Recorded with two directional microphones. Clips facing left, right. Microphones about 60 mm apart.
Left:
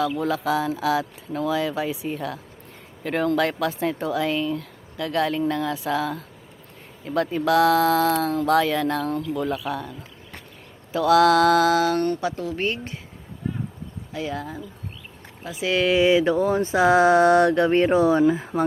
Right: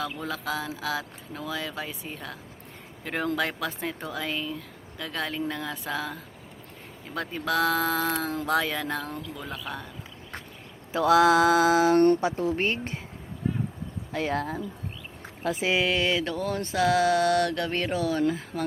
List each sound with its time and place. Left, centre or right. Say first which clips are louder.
0.2 s speech: left 8 dB; centre
10.9 s mantra: left 3 dB; right
11.9 s speech: right 3 dB; right
14.1 s speech: right 1 dB; right
16.0 s mantra: left 9 dB; centre